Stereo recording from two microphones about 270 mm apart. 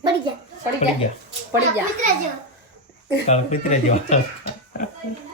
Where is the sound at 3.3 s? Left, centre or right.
Left.